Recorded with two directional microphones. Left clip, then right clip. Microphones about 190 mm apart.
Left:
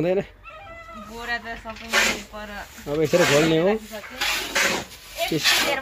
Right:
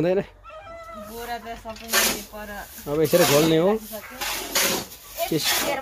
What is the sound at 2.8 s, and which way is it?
Speech, 5° right (ahead or behind).